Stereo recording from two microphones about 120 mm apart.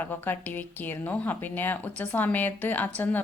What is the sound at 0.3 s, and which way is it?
A woman's voice, 15° left (ahead or behind).